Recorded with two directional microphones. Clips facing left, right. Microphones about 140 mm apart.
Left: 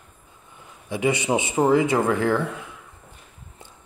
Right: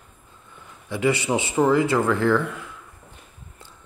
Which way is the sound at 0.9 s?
20° left (ahead or behind).